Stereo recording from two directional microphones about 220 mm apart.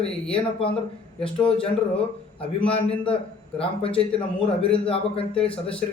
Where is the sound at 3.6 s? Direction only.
25° left (ahead or behind).